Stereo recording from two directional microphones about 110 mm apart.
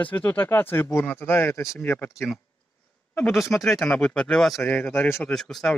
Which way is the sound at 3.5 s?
Centre (ahead or behind).